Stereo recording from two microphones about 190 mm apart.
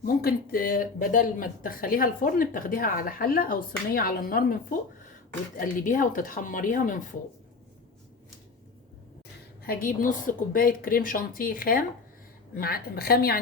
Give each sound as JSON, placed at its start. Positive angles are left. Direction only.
{"t": 0.0, "sound": "speech", "side_deg": 50}
{"t": 9.6, "sound": "speech", "side_deg": 50}